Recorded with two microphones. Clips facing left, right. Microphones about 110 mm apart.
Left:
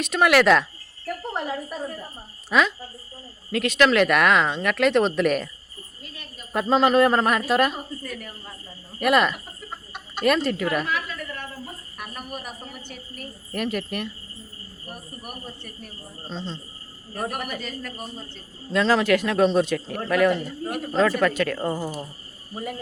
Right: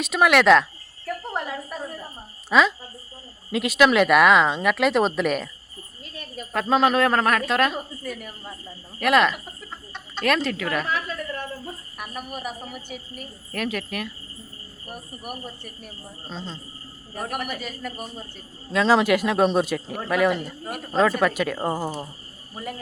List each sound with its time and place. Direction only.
0.0 s a woman's voice: centre (ahead or behind)
2.5 s a woman's voice: centre (ahead or behind)
6.5 s a woman's voice: 5° left (ahead or behind)
10.8 s a sound: 35° right (ahead or behind)
11.9 s a woman's voice: 5° right (ahead or behind)
15.2 s a woman's voice: 5° right (ahead or behind)
21.6 s speech: 40° right (ahead or behind)